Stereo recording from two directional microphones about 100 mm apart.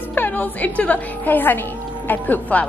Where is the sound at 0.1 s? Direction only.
15° left (ahead or behind).